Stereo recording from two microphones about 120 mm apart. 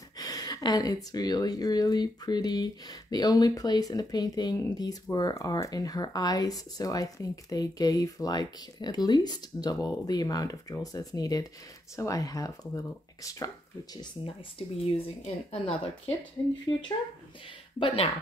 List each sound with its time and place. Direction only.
0.2 s speech: 30° left (ahead or behind)
14.6 s speech: 50° left (ahead or behind)
16.7 s speech: 40° left (ahead or behind)
17.7 s speech: 50° left (ahead or behind)